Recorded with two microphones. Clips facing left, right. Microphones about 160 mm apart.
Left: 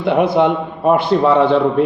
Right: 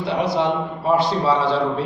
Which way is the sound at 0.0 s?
55° left (ahead or behind).